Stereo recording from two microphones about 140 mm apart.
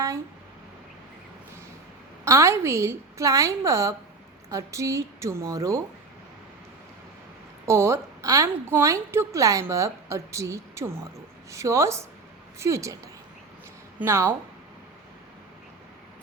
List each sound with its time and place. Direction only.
2.2 s a woman's voice: 20° right (ahead or behind)
7.7 s a woman's voice: 20° right (ahead or behind)
14.0 s speech: 15° right (ahead or behind)